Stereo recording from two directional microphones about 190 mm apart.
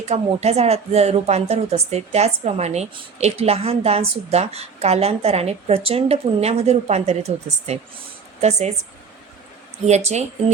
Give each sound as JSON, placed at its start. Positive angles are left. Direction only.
{"t": 0.0, "sound": "a woman's voice", "side_deg": -35}
{"t": 9.8, "sound": "a woman's voice", "side_deg": -35}